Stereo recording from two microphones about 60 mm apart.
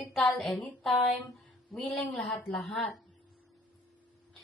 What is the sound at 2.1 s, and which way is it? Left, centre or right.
Speech, centre.